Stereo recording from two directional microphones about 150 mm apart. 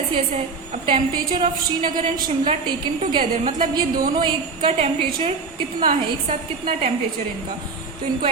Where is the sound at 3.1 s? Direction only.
35° right (ahead or behind).